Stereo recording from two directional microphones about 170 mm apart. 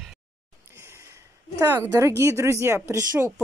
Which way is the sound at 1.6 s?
20° right (ahead or behind).